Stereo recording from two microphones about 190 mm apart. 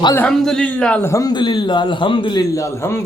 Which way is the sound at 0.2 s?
5° left (ahead or behind).